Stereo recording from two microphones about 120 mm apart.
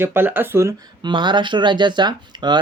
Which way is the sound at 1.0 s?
40° right (ahead or behind).